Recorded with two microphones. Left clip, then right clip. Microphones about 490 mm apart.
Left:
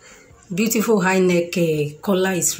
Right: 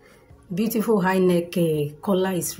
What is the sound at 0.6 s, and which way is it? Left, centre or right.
Speech, right.